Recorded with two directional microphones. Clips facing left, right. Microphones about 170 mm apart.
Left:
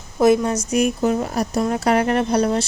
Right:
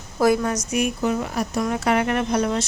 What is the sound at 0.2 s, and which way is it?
Speech, 25° left (ahead or behind).